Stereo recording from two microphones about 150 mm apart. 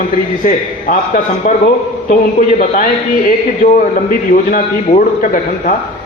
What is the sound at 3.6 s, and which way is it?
A man's voice, 70° left (ahead or behind).